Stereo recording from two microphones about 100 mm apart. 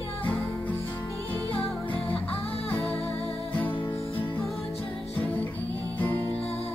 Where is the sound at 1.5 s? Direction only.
15° left (ahead or behind).